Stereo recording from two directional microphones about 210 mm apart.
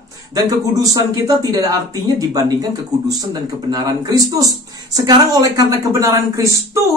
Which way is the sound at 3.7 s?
15° right (ahead or behind).